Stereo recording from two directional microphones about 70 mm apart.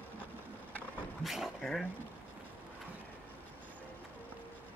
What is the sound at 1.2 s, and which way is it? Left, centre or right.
Dog, centre.